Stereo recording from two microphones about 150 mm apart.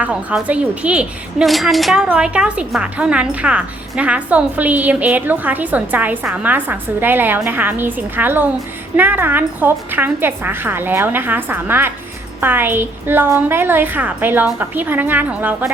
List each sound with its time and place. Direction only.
0.0 s a woman's voice: 10° right (ahead or behind)